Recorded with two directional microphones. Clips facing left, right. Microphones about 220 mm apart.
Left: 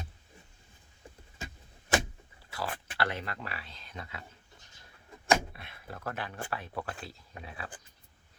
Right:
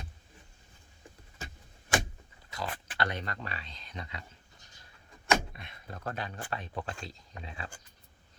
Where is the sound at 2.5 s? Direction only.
20° right (ahead or behind).